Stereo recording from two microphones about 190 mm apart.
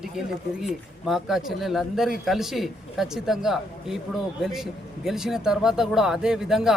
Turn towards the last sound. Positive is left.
turn(degrees=-5)  # may be behind; listen again after turning